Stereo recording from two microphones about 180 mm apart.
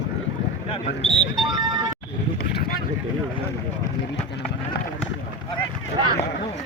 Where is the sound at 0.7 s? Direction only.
35° left (ahead or behind).